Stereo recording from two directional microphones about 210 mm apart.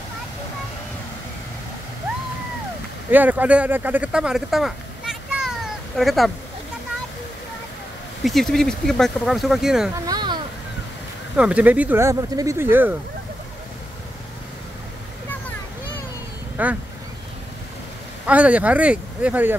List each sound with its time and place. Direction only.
3.1 s speech: 10° right (ahead or behind)
8.2 s speech: centre (ahead or behind)
10.0 s a sound: 20° right (ahead or behind)
11.3 s speech: 5° right (ahead or behind)
16.6 s speech: 5° right (ahead or behind)
18.2 s speech: 5° right (ahead or behind)